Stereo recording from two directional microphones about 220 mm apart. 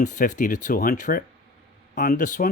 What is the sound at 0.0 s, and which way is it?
Speech, 35° left (ahead or behind).